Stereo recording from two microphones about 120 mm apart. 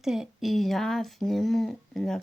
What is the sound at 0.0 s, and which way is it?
Speech, 5° right (ahead or behind).